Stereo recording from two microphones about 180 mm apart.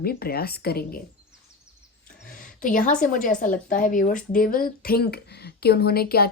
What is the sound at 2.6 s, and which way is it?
Speech, 45° left (ahead or behind).